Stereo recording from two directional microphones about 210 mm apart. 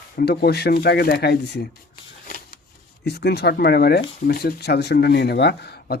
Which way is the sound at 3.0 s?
50° left (ahead or behind).